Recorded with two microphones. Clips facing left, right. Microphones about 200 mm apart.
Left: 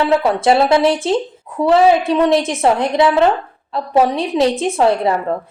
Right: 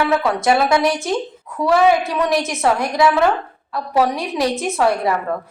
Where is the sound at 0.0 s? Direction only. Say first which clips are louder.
Left 3 dB; 20° left (ahead or behind).